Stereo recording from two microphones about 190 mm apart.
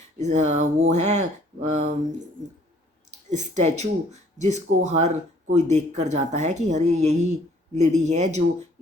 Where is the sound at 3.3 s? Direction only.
35° right (ahead or behind).